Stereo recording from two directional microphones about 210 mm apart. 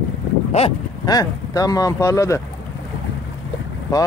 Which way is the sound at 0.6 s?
30° left (ahead or behind).